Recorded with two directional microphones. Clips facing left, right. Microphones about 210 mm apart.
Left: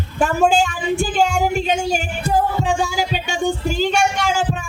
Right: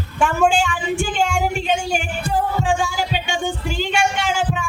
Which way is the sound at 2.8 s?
40° left (ahead or behind).